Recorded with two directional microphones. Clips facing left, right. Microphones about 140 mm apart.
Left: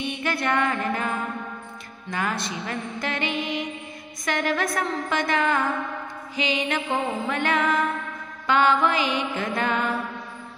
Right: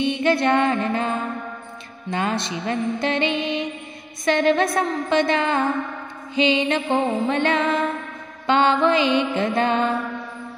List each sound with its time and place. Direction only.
0.0 s music: 25° right (ahead or behind)